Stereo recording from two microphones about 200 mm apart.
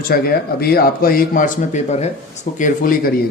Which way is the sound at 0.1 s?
50° left (ahead or behind).